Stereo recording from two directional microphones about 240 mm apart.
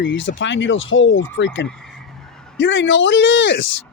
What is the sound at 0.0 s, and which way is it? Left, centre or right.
Speech, left.